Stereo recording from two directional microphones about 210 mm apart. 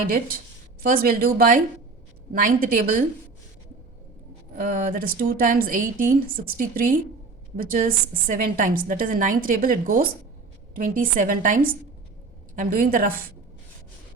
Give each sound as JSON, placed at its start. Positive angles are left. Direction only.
{"t": 0.1, "sound": "a woman's voice", "side_deg": -45}
{"t": 4.5, "sound": "a woman's voice", "side_deg": -40}